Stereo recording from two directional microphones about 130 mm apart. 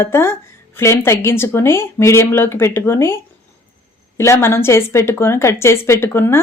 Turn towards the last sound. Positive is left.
turn(degrees=20)  # may be behind; listen again after turning